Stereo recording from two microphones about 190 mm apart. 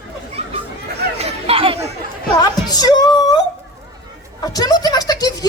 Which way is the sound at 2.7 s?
20° left (ahead or behind).